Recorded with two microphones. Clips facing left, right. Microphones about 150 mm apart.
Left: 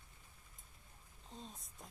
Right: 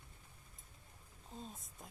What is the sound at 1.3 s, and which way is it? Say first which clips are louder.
Speech: right 2 dB; 5° right (ahead or behind).